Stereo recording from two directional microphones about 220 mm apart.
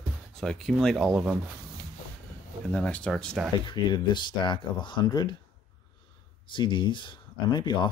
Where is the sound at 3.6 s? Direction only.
20° left (ahead or behind).